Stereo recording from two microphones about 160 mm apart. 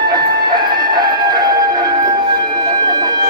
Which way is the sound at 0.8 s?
25° right (ahead or behind).